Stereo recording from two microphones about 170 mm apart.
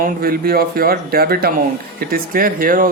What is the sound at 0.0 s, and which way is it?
Speech, 60° right (ahead or behind).